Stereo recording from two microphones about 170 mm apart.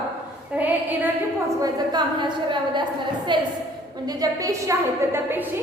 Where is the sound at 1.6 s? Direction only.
25° right (ahead or behind).